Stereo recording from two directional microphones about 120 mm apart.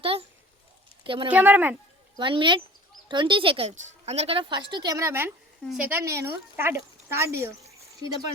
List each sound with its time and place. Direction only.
0.0 s a sound: 50° right (ahead or behind)
1.0 s a woman's voice: 45° right (ahead or behind)
1.3 s a woman's voice: 15° right (ahead or behind)
2.1 s speech: 45° right (ahead or behind)
3.7 s a woman's voice: 65° right (ahead or behind); by 5.3 s 20° right (ahead or behind)
5.6 s a woman's voice: 10° right (ahead or behind)
5.9 s a woman's voice: 25° right (ahead or behind)